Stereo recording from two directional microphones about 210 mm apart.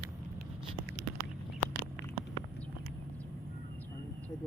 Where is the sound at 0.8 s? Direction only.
55° right (ahead or behind).